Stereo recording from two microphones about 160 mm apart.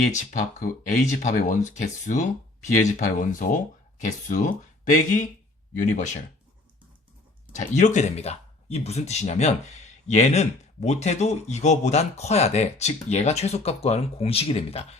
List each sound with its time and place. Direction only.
0.0 s speech: 50° left (ahead or behind)
7.5 s speech: 50° left (ahead or behind)